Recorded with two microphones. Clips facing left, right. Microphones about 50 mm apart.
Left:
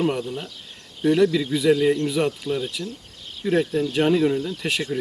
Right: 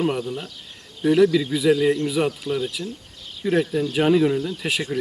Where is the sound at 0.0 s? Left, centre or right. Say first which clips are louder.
Even; centre.